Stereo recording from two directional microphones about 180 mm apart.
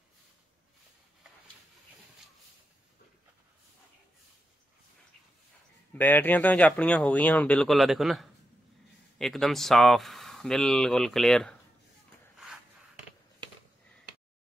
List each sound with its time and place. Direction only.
5.9 s speech: 10° left (ahead or behind)